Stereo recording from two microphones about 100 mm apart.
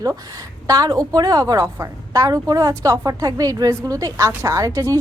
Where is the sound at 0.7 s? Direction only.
40° right (ahead or behind).